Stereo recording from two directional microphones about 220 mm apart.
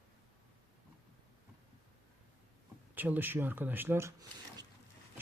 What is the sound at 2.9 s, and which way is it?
A man's voice, 10° right (ahead or behind).